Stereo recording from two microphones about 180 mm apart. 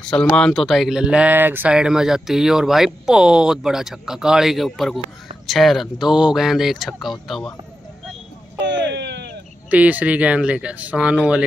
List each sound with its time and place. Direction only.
0.1 s speech: 5° left (ahead or behind)
8.6 s a sound: 80° right
9.7 s speech: 10° right (ahead or behind)